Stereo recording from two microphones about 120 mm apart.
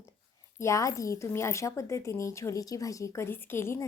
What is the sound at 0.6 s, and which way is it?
A woman's voice, 25° left (ahead or behind).